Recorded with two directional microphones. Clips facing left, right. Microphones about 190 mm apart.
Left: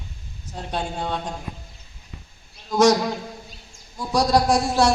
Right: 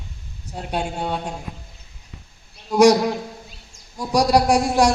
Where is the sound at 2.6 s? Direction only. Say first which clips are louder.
Right 3 dB; 10° right (ahead or behind).